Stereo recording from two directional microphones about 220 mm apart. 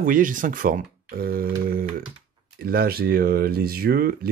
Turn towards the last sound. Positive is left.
turn(degrees=-45)  # may be behind; listen again after turning